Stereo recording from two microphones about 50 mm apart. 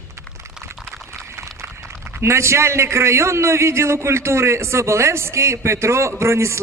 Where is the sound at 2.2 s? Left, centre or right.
Right.